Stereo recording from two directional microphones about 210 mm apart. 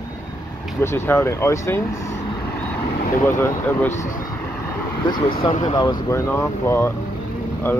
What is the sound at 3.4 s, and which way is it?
Speech, 10° left (ahead or behind).